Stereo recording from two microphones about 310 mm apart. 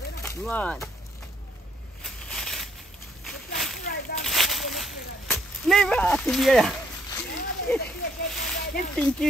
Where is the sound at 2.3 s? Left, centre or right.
Centre.